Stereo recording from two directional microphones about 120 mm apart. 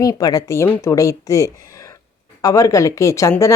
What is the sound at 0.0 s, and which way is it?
Speech, 35° left (ahead or behind).